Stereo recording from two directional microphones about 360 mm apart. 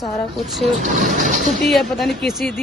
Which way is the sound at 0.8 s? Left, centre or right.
Right.